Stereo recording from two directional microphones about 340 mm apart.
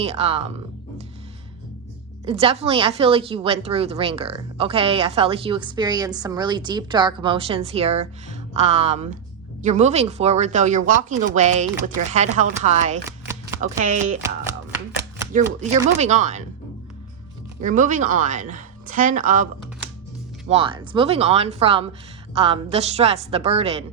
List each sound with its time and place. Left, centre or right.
0.0 s a woman's voice: centre
2.2 s a woman's voice: centre
13.1 s shuffling cards: centre
13.6 s speech: right
15.3 s speech: right
17.6 s speech: right
20.5 s a woman's voice: centre